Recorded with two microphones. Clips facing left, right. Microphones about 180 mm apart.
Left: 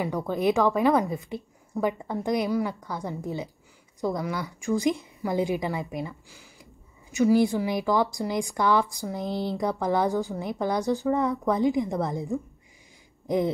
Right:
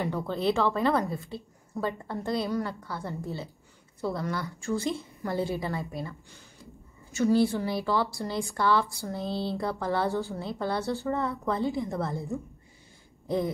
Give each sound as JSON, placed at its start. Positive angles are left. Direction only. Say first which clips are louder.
{"t": 0.0, "sound": "a woman's voice", "louder": "left 3 dB", "side_deg": 10}